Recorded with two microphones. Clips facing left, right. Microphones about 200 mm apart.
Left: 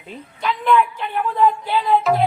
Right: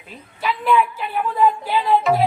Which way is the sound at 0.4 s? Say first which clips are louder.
Left 1 dB; 5° right (ahead or behind).